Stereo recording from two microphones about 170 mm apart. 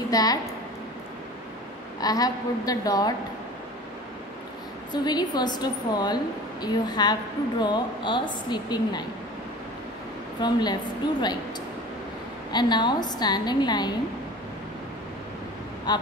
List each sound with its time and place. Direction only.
0.1 s a woman's voice: 20° left (ahead or behind)
2.0 s a woman's voice: 20° left (ahead or behind)
4.9 s a woman's voice: 25° left (ahead or behind)
10.4 s a woman's voice: 25° left (ahead or behind)
12.5 s a woman's voice: 25° left (ahead or behind)
15.9 s a woman's voice: 25° left (ahead or behind)